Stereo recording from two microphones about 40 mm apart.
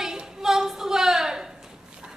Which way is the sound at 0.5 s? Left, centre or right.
Centre.